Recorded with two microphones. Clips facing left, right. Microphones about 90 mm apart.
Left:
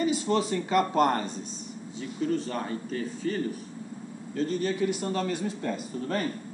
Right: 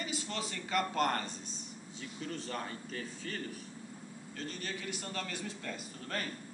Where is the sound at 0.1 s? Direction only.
20° left (ahead or behind).